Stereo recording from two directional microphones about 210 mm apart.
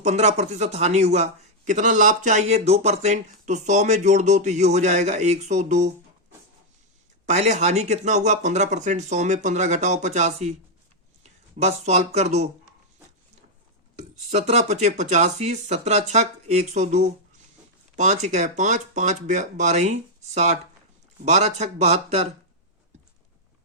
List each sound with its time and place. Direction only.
0.0 s speech: 30° right (ahead or behind)
7.3 s speech: 35° right (ahead or behind)
13.9 s speech: 30° right (ahead or behind)